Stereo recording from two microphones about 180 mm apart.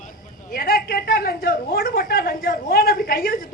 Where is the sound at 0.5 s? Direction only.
55° left (ahead or behind).